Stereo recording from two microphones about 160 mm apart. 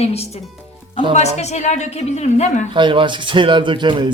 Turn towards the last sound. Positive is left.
turn(degrees=-30)  # may be behind; listen again after turning